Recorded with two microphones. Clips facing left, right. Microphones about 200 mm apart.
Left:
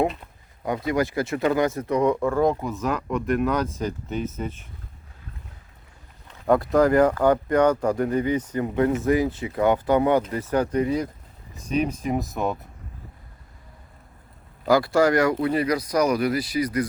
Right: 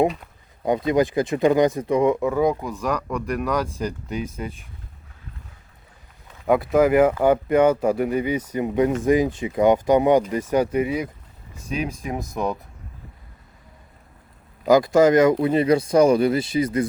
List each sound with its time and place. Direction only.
0.9 s speech: 20° right (ahead or behind)
6.4 s speech: centre (ahead or behind)
14.7 s speech: 20° right (ahead or behind)